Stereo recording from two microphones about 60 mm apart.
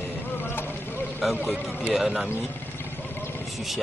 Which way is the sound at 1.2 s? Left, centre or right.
Centre.